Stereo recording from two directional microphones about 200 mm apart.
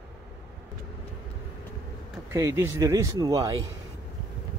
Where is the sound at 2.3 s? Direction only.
15° right (ahead or behind).